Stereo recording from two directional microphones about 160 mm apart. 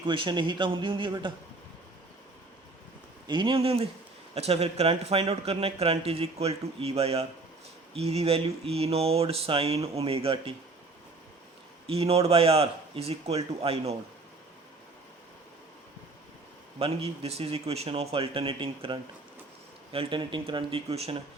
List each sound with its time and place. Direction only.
0.0 s a man's voice: 30° right (ahead or behind)
3.2 s a man's voice: 30° right (ahead or behind)
11.9 s a man's voice: 40° right (ahead or behind)
16.7 s a man's voice: 35° right (ahead or behind)